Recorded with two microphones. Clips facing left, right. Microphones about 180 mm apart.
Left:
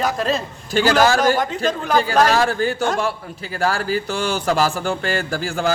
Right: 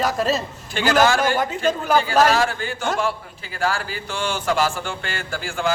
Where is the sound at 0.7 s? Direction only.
40° left (ahead or behind).